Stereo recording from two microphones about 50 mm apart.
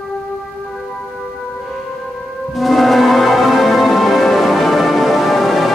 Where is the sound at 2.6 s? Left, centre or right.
Centre.